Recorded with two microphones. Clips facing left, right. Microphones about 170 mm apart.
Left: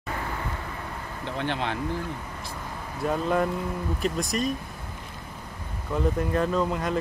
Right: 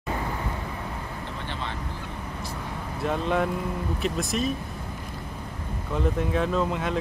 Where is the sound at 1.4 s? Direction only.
65° left (ahead or behind).